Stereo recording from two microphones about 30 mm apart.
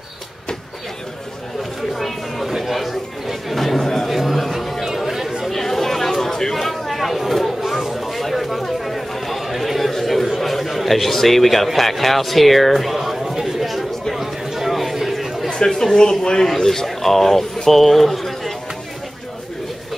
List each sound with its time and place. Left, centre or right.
2.0 s a sound: centre
2.5 s chatter: centre
3.6 s chatter: centre
5.5 s chatter: centre
10.2 s a man's voice: centre
13.2 s a sound: centre
15.5 s speech: centre
16.6 s speech: centre